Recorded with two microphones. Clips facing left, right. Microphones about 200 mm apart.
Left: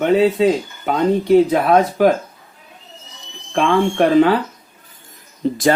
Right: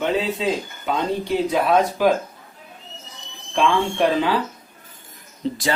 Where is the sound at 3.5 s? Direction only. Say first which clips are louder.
Left 4 dB; 55° left (ahead or behind).